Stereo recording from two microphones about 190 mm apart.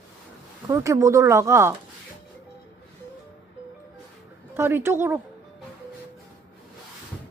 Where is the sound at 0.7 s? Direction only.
15° right (ahead or behind).